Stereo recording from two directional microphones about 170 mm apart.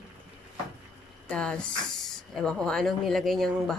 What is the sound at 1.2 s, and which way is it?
Speech, 5° left (ahead or behind).